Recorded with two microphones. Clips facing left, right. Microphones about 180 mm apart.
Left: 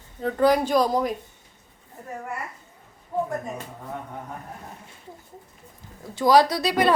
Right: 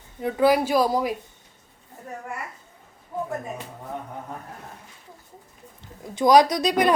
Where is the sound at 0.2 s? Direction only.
10° right (ahead or behind).